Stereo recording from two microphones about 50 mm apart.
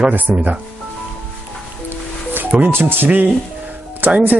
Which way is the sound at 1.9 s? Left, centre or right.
Right.